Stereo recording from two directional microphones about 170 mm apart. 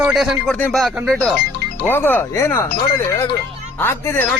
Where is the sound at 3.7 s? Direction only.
15° left (ahead or behind).